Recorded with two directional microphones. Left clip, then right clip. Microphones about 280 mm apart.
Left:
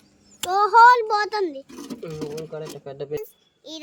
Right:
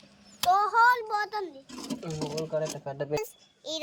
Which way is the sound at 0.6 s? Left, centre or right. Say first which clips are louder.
Left 12 dB; left.